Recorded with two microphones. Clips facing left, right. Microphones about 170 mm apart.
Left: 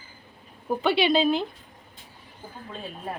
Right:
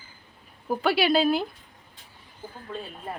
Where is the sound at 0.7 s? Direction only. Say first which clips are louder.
Left 1 dB; 5° right (ahead or behind).